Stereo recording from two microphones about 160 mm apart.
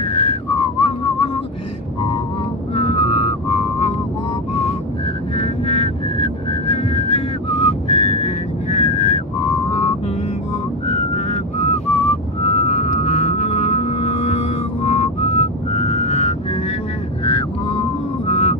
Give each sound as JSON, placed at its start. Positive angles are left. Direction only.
{"t": 0.0, "sound": "whistling", "side_deg": 40}
{"t": 2.7, "sound": "whistling", "side_deg": 35}
{"t": 5.4, "sound": "whistling", "side_deg": 35}
{"t": 9.7, "sound": "vehicle", "side_deg": 35}
{"t": 10.9, "sound": "whistling", "side_deg": 40}
{"t": 17.2, "sound": "a sound", "side_deg": 30}